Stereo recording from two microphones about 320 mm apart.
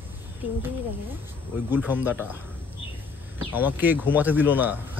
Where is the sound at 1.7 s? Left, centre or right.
Centre.